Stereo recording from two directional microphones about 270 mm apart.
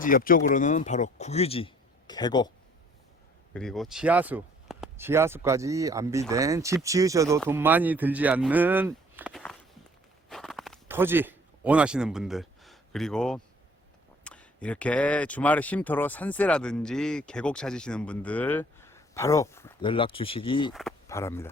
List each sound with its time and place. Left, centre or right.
0.0 s speech: left; by 2.5 s centre
3.5 s speech: centre
10.2 s a sound: centre
14.3 s speech: centre